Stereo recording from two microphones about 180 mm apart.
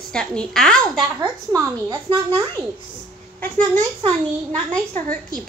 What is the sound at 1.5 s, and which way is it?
Speech, 20° right (ahead or behind).